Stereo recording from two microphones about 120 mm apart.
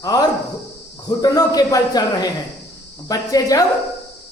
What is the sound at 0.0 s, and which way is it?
Speech, 30° left (ahead or behind).